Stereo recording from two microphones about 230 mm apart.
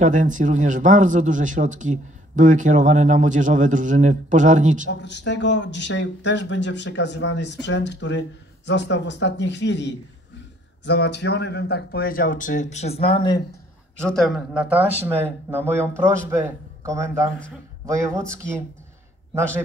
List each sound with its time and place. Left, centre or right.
0.0 s speech: right
5.0 s speech: left
14.0 s a man's voice: centre